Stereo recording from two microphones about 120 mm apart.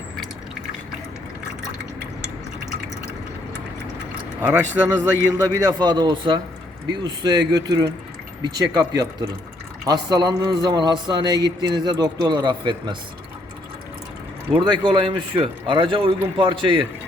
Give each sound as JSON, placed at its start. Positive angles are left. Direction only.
{"t": 4.4, "sound": "speech", "side_deg": -15}
{"t": 5.8, "sound": "speech", "side_deg": -35}
{"t": 14.5, "sound": "a man's voice", "side_deg": -40}